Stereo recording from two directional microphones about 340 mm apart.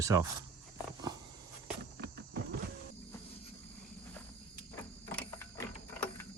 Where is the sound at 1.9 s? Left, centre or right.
Right.